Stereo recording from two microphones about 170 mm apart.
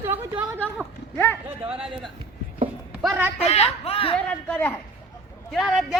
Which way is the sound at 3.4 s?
35° left (ahead or behind).